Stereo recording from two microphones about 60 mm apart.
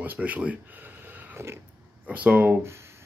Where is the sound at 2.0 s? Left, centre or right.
Right.